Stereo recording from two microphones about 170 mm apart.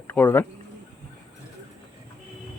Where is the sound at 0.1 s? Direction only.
10° left (ahead or behind).